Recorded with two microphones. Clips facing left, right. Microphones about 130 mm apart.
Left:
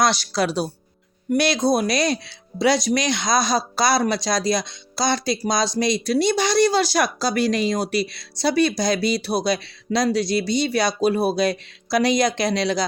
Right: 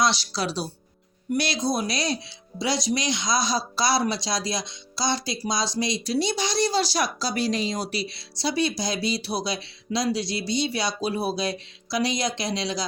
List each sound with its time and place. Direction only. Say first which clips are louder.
0.0 s speech: left 4 dB; 50° left (ahead or behind)